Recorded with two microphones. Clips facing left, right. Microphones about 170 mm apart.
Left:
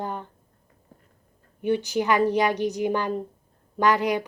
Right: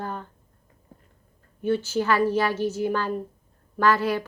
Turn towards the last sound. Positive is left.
turn(degrees=15)  # may be behind; listen again after turning